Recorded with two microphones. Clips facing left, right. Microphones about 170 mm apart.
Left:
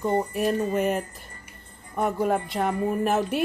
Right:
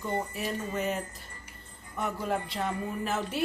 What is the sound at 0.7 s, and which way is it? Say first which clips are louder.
A woman's voice: left 7 dB; 55° left (ahead or behind).